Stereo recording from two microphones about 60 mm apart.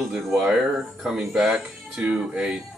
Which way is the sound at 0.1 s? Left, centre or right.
Centre.